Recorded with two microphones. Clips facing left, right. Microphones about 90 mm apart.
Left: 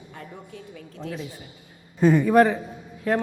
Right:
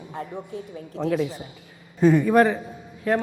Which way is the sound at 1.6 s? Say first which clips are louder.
Right 3 dB; 90° right.